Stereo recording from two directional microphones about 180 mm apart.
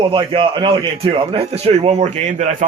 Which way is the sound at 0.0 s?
30° right (ahead or behind).